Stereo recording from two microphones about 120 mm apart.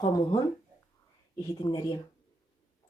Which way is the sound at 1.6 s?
30° left (ahead or behind).